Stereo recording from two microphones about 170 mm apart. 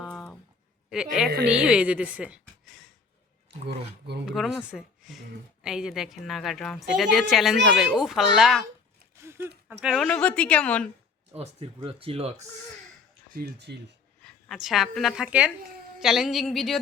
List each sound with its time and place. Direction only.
0.0 s a sound: centre (ahead or behind)
0.9 s a woman's voice: 5° right (ahead or behind)
3.7 s speech: 75° right (ahead or behind)
4.3 s a woman's voice: centre (ahead or behind)
9.1 s a sound: 15° right (ahead or behind)
9.8 s a woman's voice: centre (ahead or behind)
11.3 s speech: 35° right (ahead or behind)
13.7 s speech: 80° right
14.4 s a woman's voice: centre (ahead or behind)